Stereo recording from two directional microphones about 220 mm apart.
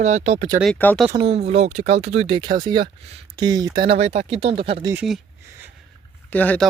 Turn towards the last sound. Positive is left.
turn(degrees=5)  # may be behind; listen again after turning